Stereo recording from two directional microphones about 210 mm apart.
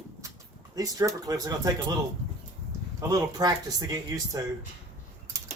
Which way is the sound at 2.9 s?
20° right (ahead or behind).